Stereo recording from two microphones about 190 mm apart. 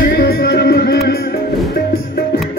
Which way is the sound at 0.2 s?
55° left (ahead or behind).